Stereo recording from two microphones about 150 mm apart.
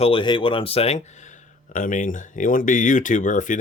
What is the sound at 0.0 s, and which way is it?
Speech, 35° left (ahead or behind).